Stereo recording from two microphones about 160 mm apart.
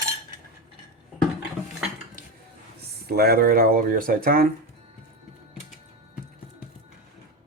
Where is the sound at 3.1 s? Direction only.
75° right (ahead or behind).